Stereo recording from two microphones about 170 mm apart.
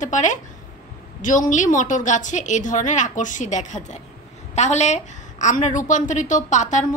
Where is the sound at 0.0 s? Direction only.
45° left (ahead or behind).